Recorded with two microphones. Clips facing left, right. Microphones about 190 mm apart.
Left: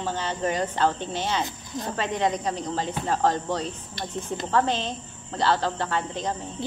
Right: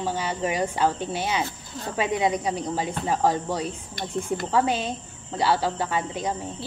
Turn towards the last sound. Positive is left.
turn(degrees=-10)  # may be behind; listen again after turning